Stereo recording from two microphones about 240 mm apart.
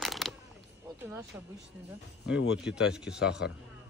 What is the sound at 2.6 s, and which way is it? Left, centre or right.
Speech, centre.